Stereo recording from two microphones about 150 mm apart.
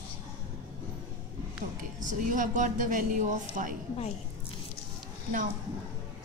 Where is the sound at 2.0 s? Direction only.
60° right (ahead or behind).